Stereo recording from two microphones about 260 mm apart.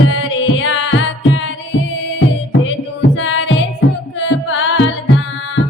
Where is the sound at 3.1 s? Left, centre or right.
Left.